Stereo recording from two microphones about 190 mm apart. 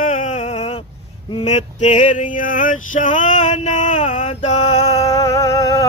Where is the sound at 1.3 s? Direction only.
30° left (ahead or behind).